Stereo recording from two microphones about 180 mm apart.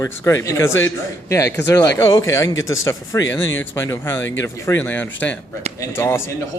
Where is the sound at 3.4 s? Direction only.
90° left.